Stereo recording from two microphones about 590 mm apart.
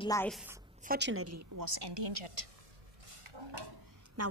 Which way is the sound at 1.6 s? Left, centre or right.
Right.